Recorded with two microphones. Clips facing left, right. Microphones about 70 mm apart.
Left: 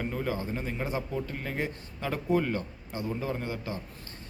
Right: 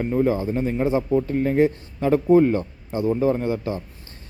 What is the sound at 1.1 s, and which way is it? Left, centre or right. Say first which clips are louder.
Speech: right 14 dB; right.